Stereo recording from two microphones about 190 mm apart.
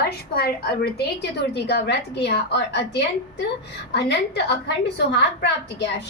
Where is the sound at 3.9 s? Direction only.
65° left (ahead or behind).